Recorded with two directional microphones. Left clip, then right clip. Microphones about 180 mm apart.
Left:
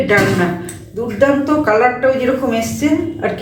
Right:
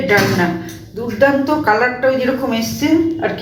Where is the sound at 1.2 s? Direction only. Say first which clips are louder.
Even; 5° left (ahead or behind).